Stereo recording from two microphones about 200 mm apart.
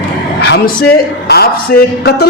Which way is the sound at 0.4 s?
55° left (ahead or behind).